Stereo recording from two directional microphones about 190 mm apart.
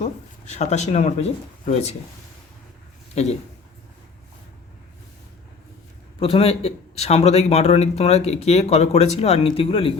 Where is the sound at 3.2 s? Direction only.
35° left (ahead or behind).